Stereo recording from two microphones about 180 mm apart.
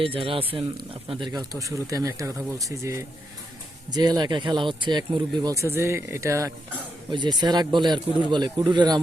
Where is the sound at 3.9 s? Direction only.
25° right (ahead or behind).